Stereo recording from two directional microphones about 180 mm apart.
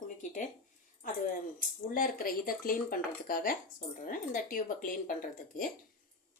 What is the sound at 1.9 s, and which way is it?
Speech, 50° left (ahead or behind).